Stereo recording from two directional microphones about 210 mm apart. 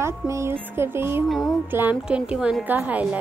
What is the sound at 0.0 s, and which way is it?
Speech, 15° right (ahead or behind).